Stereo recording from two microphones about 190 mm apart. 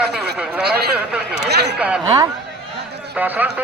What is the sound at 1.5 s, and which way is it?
Speech, 60° right (ahead or behind).